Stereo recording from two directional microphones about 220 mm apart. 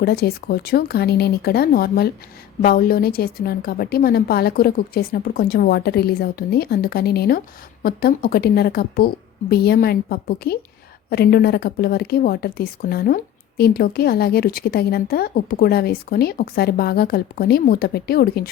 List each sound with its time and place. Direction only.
0.0 s a woman's voice: 45° left (ahead or behind)